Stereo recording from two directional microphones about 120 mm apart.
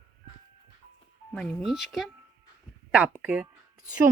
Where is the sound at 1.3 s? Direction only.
Centre (ahead or behind).